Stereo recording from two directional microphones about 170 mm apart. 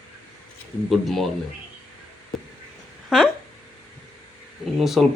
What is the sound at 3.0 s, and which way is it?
Speech, 5° right (ahead or behind).